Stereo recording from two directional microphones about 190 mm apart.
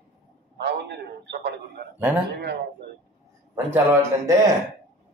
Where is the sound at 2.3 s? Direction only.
60° right (ahead or behind).